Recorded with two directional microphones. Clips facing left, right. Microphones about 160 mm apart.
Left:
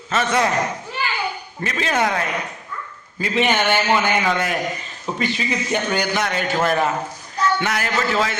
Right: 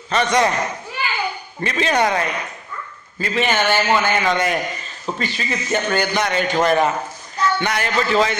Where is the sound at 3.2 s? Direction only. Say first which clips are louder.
Even; 15° left (ahead or behind).